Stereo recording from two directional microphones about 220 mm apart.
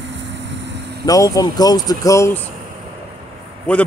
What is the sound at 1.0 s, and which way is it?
Speech, 15° left (ahead or behind).